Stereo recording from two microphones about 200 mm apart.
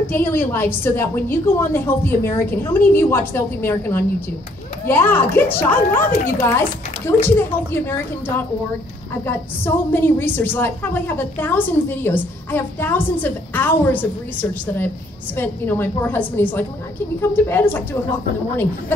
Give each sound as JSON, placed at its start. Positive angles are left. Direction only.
{"t": 0.0, "sound": "a woman's voice", "side_deg": 10}
{"t": 9.2, "sound": "a woman's voice", "side_deg": 10}
{"t": 15.3, "sound": "a woman's voice", "side_deg": 10}